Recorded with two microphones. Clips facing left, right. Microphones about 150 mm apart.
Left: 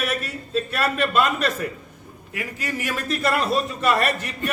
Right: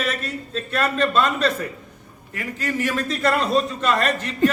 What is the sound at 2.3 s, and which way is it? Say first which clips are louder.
A man's voice: right 3 dB; 10° left (ahead or behind).